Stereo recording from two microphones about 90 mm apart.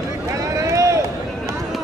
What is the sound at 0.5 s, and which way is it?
Run, 35° right (ahead or behind).